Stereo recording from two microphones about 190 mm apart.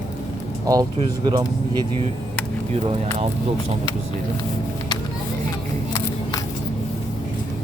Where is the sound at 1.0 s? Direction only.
25° right (ahead or behind).